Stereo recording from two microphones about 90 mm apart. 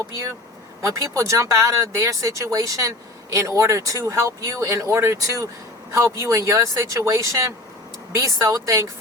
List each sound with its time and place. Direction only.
0.8 s speech: 35° right (ahead or behind)